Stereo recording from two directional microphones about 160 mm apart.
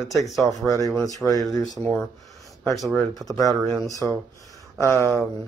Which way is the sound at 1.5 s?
25° left (ahead or behind).